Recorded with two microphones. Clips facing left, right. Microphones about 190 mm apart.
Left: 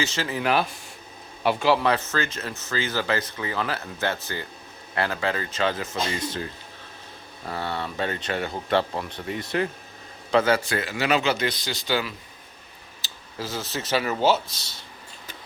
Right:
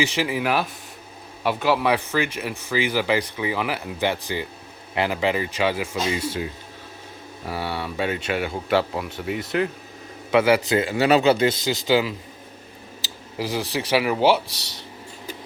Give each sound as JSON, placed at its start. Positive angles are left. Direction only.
{"t": 0.0, "sound": "speech", "side_deg": -15}
{"t": 11.7, "sound": "speech", "side_deg": -15}
{"t": 13.4, "sound": "speech", "side_deg": -15}